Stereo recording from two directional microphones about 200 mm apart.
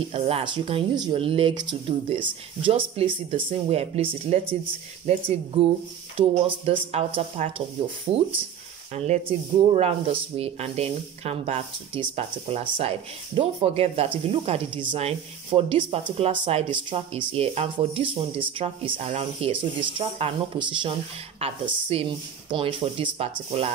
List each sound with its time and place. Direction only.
0.1 s speech: 30° right (ahead or behind)